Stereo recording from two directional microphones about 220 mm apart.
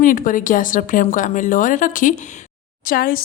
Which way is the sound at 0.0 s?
40° left (ahead or behind).